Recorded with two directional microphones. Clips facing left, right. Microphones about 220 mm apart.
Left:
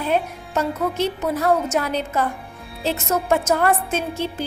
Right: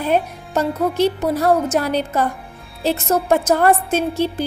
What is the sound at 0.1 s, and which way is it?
A woman's voice, 35° right (ahead or behind).